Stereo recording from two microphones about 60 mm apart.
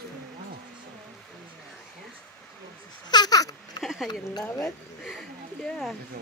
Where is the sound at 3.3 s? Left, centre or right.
Left.